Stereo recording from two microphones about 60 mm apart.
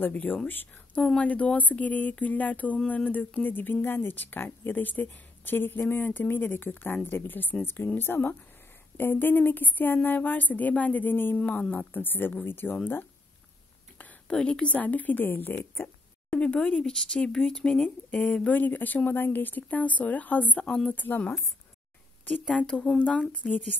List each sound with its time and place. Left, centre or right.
0.0 s speech: left
14.3 s speech: centre; by 16.0 s left
16.5 s speech: centre
18.5 s speech: left
22.9 s speech: left